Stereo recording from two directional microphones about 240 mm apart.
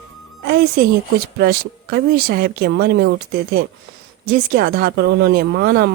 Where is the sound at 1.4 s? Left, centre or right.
Right.